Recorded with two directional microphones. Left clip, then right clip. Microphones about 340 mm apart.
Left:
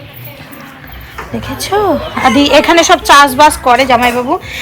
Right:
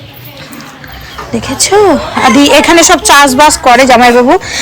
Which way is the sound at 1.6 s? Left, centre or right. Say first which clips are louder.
Right 6 dB; centre.